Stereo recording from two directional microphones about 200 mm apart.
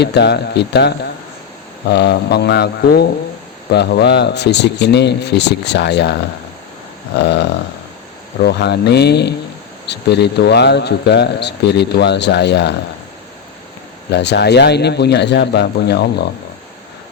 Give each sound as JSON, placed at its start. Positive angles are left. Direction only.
{"t": 0.0, "sound": "speech", "side_deg": 55}
{"t": 7.2, "sound": "speech", "side_deg": 60}
{"t": 8.4, "sound": "speech", "side_deg": 55}
{"t": 14.1, "sound": "speech", "side_deg": 60}